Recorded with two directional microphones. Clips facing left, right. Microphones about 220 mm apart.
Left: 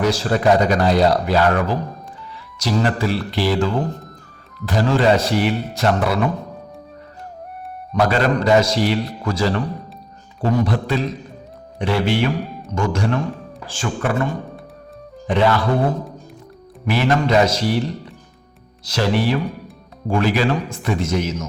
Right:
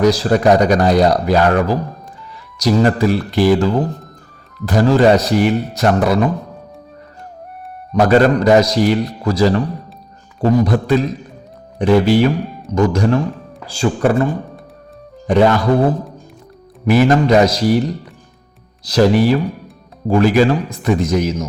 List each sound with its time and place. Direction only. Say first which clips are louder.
0.0 s speech: right 5 dB; 35° right (ahead or behind)
7.9 s speech: right 6 dB; 45° right (ahead or behind)
15.3 s speech: right 5 dB; 45° right (ahead or behind)
16.8 s speech: right 6 dB; 45° right (ahead or behind)
18.9 s speech: right 7 dB; 40° right (ahead or behind)